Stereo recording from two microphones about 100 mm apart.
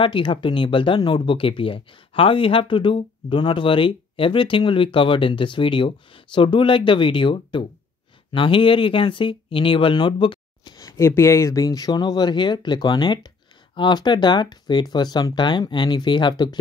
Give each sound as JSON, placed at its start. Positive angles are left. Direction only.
{"t": 0.0, "sound": "speech", "side_deg": 60}